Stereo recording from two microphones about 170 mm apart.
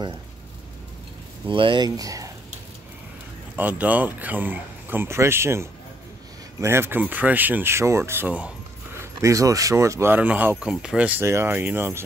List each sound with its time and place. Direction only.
1.5 s speech: 30° right (ahead or behind)
3.5 s speech: 10° right (ahead or behind)